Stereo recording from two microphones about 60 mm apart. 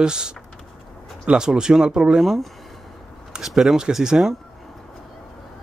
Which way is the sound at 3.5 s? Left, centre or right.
Centre.